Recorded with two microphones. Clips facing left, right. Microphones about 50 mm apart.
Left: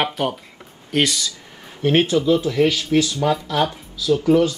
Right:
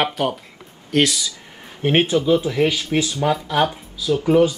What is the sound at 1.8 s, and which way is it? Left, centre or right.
Speech, right.